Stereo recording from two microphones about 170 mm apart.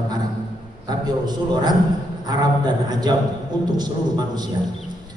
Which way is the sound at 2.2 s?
25° right (ahead or behind).